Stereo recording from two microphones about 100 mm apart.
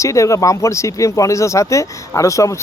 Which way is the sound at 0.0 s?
30° left (ahead or behind).